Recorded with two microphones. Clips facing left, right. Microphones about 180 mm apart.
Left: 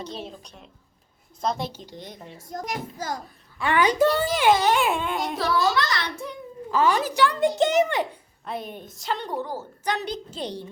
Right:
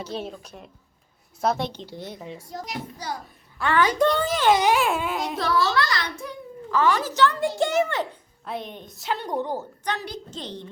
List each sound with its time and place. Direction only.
0.0 s a woman's voice: 5° right (ahead or behind)
2.5 s a child's voice: 45° left (ahead or behind)
3.6 s a woman's voice: 15° left (ahead or behind)
4.5 s a child's voice: 15° right (ahead or behind)
4.8 s a woman's voice: 5° right (ahead or behind)
5.5 s a child's voice: 20° left (ahead or behind)
8.4 s a woman's voice: 5° left (ahead or behind); by 9.6 s 20° right (ahead or behind)
9.9 s a woman's voice: 10° left (ahead or behind)